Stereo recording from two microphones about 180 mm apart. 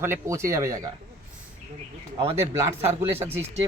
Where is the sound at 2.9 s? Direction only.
15° right (ahead or behind).